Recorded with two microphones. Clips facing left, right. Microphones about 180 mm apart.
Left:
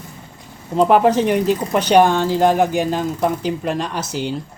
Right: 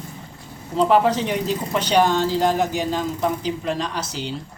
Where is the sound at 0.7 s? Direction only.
55° left (ahead or behind).